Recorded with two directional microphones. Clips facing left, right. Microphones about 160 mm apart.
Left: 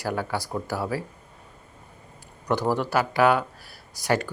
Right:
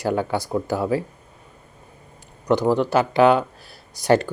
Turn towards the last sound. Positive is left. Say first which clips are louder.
# right 7 dB
turn(degrees=-25)  # may be behind; listen again after turning